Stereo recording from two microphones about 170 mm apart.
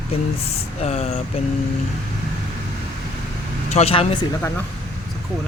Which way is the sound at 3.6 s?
40° left (ahead or behind).